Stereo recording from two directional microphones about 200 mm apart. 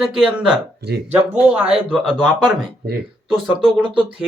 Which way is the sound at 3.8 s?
25° right (ahead or behind).